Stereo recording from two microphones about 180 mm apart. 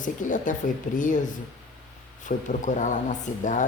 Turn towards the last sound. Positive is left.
turn(degrees=45)  # may be behind; listen again after turning